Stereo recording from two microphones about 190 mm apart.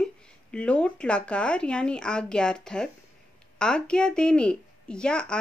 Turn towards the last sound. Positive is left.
turn(degrees=5)  # may be behind; listen again after turning